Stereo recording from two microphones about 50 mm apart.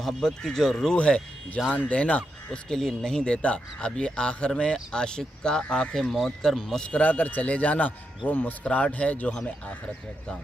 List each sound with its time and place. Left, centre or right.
0.0 s speech: centre
0.9 s a man's voice: left
2.7 s a man's voice: centre
6.1 s speech: centre
6.8 s a man's voice: left